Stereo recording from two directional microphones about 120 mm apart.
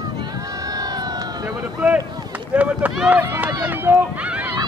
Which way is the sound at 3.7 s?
15° right (ahead or behind).